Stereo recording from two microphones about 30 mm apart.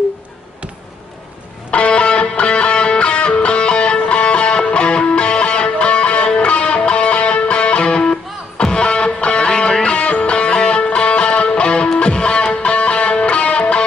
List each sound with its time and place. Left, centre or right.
1.7 s music: left
9.9 s music: left